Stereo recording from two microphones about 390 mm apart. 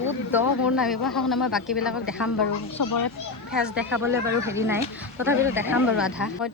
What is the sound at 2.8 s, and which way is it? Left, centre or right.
Speech, left.